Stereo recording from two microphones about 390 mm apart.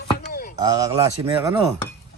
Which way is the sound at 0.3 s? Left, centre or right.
Left.